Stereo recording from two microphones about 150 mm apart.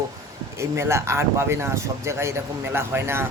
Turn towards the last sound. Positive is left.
turn(degrees=-15)  # may be behind; listen again after turning